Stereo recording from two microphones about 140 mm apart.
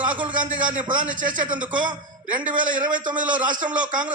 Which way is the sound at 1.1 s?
70° right (ahead or behind).